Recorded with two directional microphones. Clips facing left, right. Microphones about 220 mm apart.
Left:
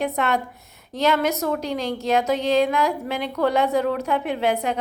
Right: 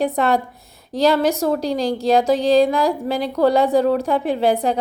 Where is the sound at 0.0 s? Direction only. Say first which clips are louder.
Right 5 dB; 35° right (ahead or behind).